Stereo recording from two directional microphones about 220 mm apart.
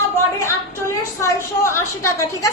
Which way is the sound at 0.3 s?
15° left (ahead or behind).